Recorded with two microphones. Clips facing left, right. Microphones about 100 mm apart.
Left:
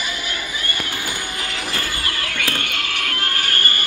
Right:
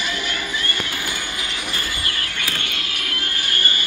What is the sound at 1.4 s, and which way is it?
Music, 55° left (ahead or behind).